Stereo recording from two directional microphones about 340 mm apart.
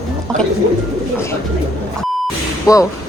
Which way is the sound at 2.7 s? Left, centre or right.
Centre.